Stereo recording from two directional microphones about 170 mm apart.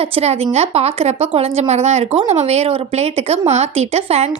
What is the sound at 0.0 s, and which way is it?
A woman's voice, 35° right (ahead or behind).